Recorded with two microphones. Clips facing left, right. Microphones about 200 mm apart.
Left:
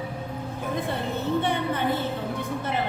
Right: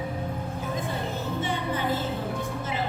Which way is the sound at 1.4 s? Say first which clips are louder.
Left 3 dB; 60° left (ahead or behind).